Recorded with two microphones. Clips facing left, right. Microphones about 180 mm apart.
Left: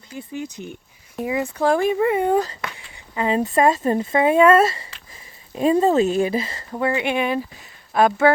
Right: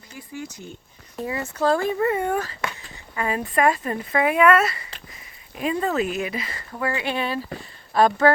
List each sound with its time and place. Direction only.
0.2 s speech: 20° left (ahead or behind)